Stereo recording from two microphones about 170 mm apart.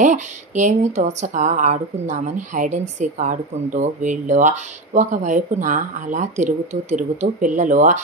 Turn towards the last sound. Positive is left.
turn(degrees=-45)  # may be behind; listen again after turning